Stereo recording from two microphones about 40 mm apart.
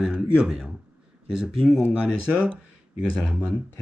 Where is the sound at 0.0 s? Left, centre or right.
Centre.